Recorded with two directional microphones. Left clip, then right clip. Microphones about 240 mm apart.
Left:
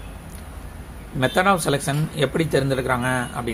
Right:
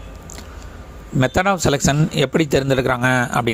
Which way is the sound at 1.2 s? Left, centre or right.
Right.